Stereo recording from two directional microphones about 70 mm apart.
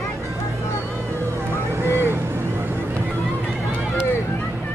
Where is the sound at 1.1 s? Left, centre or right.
Right.